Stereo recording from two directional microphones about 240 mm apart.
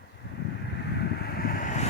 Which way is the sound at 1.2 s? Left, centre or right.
Left.